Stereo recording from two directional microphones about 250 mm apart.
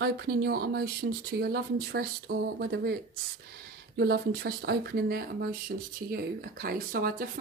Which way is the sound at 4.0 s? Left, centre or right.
Right.